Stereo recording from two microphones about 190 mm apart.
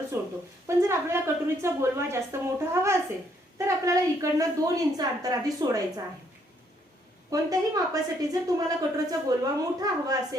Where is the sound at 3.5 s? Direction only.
15° right (ahead or behind).